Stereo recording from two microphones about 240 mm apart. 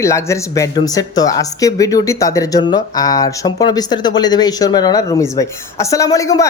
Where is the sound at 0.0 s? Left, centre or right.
Centre.